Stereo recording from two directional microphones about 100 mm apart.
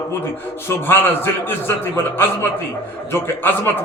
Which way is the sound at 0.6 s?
20° left (ahead or behind).